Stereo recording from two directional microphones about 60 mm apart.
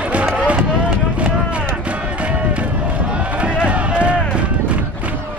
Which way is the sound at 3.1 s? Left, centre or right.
Right.